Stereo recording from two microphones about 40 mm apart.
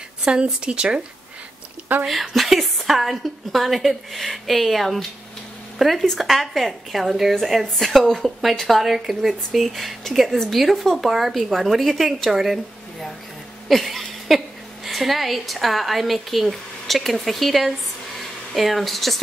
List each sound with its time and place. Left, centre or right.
0.2 s speech: right
1.9 s speech: right
2.3 s speech: centre
13.7 s a sound: centre
14.9 s speech: centre